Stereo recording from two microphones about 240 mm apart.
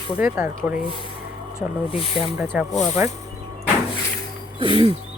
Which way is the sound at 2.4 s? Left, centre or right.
Centre.